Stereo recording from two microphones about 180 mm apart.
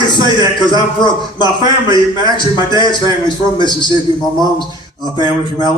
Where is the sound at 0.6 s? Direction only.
25° left (ahead or behind).